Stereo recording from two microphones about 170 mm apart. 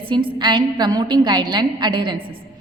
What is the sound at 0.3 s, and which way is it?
A woman's voice, 25° right (ahead or behind).